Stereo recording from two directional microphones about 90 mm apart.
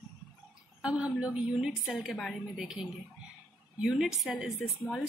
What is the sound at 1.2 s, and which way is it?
Speech, 10° right (ahead or behind).